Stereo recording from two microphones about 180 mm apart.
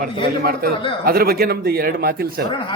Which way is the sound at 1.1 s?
55° right (ahead or behind).